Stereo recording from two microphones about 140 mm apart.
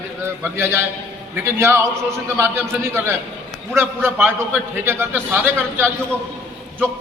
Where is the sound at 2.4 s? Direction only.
15° right (ahead or behind).